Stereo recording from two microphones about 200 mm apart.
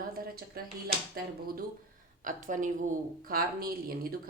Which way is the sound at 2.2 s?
40° right (ahead or behind).